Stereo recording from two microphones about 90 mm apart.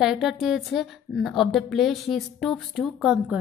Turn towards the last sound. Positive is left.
turn(degrees=-10)  # may be behind; listen again after turning